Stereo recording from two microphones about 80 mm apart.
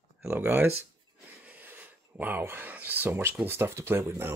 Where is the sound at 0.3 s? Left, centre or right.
Right.